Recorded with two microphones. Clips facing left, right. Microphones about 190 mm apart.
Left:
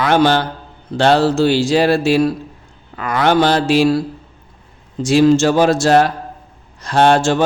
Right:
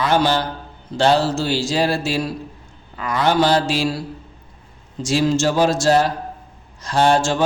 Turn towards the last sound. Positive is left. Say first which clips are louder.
# left 4 dB
turn(degrees=60)  # may be behind; listen again after turning